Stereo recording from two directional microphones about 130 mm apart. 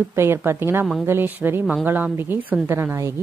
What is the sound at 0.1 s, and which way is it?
A woman's voice, 20° right (ahead or behind).